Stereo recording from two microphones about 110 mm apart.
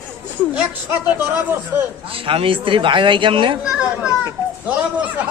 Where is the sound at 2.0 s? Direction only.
55° right (ahead or behind).